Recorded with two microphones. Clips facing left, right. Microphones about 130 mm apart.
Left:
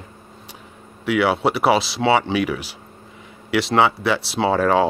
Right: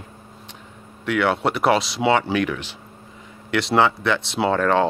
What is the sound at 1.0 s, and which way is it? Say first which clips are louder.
Speech: left 2 dB; 5° left (ahead or behind).